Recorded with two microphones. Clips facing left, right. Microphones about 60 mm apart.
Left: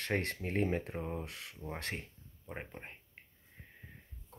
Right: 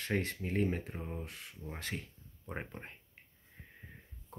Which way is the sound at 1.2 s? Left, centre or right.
Left.